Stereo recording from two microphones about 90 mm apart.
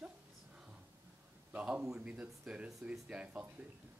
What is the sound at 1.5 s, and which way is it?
Speech, 15° right (ahead or behind).